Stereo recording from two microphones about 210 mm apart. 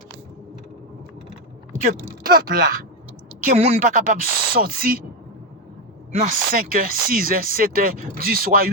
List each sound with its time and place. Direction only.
1.7 s speech: 40° right (ahead or behind)
6.1 s speech: 35° right (ahead or behind)